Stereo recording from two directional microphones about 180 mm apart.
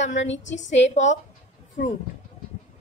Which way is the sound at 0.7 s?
40° left (ahead or behind).